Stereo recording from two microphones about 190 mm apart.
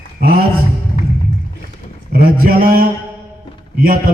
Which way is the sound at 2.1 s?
55° right (ahead or behind).